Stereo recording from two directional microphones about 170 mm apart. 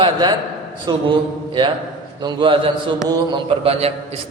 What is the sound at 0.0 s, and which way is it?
Speech, 25° right (ahead or behind).